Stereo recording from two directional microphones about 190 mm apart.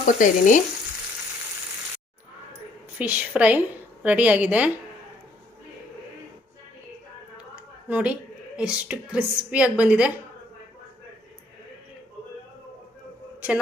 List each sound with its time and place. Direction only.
0.2 s frying: 40° left (ahead or behind)
3.0 s a woman's voice: 10° right (ahead or behind)
7.9 s a woman's voice: 5° right (ahead or behind)